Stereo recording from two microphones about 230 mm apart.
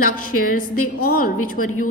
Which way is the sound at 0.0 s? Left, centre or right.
Left.